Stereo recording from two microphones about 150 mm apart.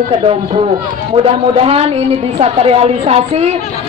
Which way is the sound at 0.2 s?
40° right (ahead or behind).